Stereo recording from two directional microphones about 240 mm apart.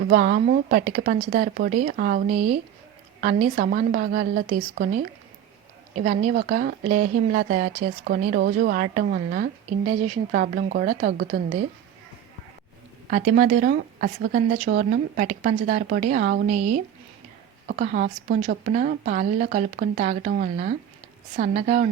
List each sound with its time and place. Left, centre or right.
0.0 s a woman's voice: right
13.1 s a woman's voice: right